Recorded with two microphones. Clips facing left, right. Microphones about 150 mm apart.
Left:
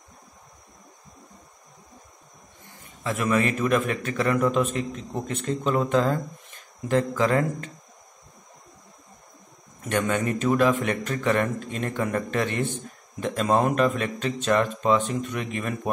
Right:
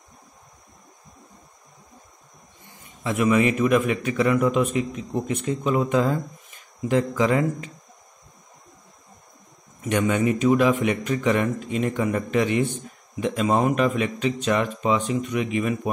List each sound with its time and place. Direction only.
3.0 s speech: 10° right (ahead or behind)
9.8 s speech: 10° right (ahead or behind)